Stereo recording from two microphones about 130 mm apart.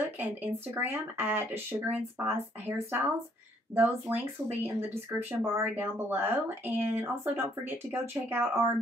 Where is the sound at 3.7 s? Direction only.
15° right (ahead or behind).